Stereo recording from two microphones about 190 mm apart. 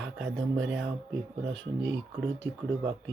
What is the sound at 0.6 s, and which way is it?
Speech, 75° right (ahead or behind).